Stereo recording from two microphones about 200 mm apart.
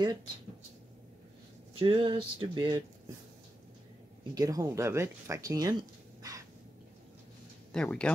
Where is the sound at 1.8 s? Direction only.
25° right (ahead or behind).